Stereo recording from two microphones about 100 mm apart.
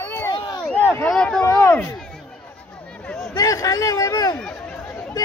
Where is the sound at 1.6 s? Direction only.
25° left (ahead or behind).